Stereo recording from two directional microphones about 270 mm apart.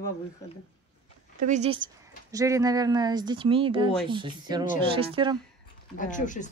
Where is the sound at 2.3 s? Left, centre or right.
Centre.